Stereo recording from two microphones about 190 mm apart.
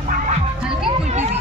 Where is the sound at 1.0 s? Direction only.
35° right (ahead or behind).